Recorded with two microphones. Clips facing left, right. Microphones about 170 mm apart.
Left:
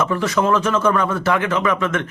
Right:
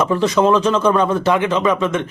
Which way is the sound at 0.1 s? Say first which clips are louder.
Right 4 dB; 20° right (ahead or behind).